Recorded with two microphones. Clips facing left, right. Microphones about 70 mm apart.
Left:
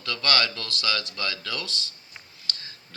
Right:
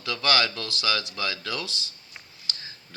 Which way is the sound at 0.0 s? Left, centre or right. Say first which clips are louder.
Right 1 dB; centre.